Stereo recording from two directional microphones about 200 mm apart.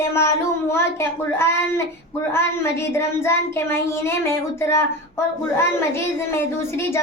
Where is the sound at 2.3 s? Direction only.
10° left (ahead or behind).